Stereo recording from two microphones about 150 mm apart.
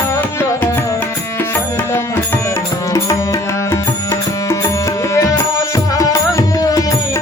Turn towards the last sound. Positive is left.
turn(degrees=25)  # may be behind; listen again after turning